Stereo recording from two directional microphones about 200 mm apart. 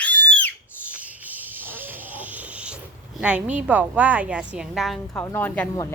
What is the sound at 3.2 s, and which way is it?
A woman's voice, 5° right (ahead or behind).